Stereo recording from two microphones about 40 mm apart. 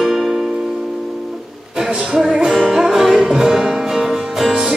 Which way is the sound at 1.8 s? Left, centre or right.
Centre.